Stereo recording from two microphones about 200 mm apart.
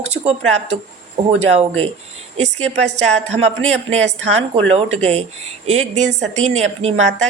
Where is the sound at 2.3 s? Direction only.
35° right (ahead or behind).